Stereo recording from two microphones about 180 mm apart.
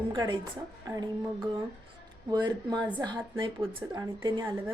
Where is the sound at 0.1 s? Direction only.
25° right (ahead or behind).